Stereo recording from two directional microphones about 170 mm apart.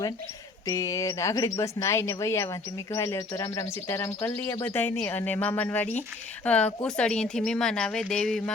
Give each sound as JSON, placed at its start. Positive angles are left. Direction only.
{"t": 0.7, "sound": "speech", "side_deg": 20}